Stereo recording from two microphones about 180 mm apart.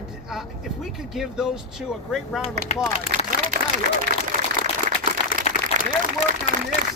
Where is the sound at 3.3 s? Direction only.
55° left (ahead or behind).